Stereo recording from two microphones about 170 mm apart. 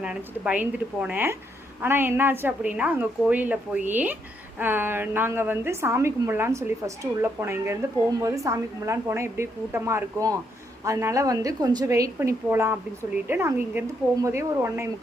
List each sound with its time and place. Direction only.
0.0 s a woman's voice: 5° right (ahead or behind)